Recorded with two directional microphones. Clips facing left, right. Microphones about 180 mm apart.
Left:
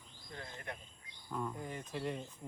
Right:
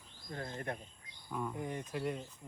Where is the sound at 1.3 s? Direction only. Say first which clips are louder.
Right 2 dB; 5° right (ahead or behind).